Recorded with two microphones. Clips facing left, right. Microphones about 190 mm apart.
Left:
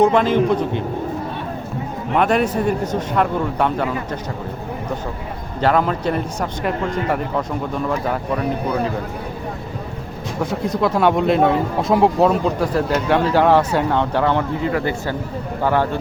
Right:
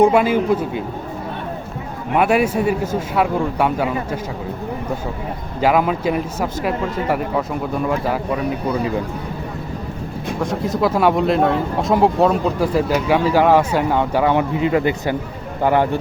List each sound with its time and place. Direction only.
0.0 s speech: 10° right (ahead or behind)
2.1 s speech: 10° right (ahead or behind)
5.5 s speech: 10° right (ahead or behind)
10.4 s speech: centre (ahead or behind); by 16.0 s 15° right (ahead or behind)